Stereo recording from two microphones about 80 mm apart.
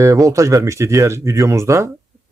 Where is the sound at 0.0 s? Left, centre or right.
Right.